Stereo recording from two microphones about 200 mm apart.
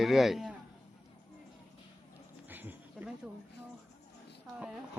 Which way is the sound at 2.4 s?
10° right (ahead or behind).